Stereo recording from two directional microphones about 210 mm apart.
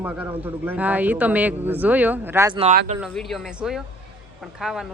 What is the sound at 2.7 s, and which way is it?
Speech, 40° right (ahead or behind).